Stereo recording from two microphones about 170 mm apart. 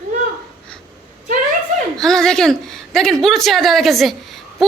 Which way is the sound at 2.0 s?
5° left (ahead or behind).